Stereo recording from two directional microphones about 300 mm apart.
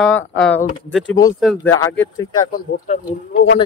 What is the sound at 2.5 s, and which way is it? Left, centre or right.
Speech, left.